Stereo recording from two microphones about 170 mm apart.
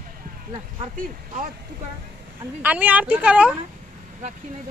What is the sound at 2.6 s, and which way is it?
Speech, 10° right (ahead or behind).